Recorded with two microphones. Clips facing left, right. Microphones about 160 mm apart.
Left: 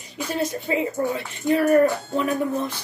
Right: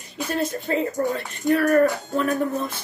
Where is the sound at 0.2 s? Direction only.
10° left (ahead or behind).